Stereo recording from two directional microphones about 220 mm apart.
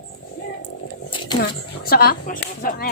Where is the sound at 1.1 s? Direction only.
20° left (ahead or behind).